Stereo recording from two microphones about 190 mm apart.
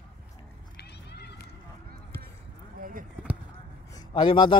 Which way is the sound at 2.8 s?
45° right (ahead or behind).